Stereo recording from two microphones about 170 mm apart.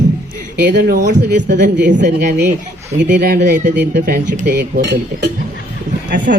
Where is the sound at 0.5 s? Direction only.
80° right.